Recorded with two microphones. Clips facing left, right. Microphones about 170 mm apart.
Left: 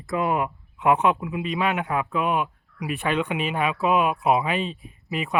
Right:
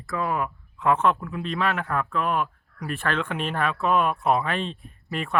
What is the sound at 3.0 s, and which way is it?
Speech, 15° left (ahead or behind).